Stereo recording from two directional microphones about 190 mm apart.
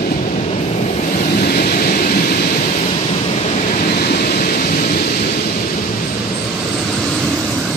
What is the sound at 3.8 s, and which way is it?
Thunder, 55° left (ahead or behind).